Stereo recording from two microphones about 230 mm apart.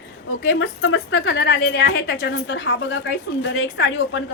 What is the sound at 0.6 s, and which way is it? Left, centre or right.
A woman's voice, left.